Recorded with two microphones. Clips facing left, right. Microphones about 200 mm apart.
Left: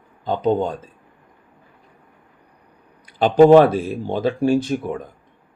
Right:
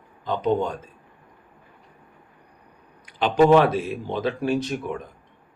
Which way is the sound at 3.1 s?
40° left (ahead or behind).